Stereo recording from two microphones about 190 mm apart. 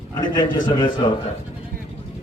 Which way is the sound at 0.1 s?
20° left (ahead or behind).